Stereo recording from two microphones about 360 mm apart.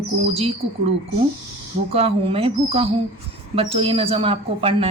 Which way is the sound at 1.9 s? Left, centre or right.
Centre.